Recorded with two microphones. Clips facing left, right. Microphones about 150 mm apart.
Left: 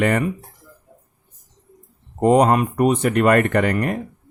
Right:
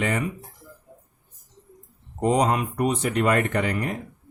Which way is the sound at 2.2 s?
55° left (ahead or behind).